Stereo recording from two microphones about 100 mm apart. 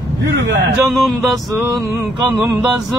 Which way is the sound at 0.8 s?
Centre (ahead or behind).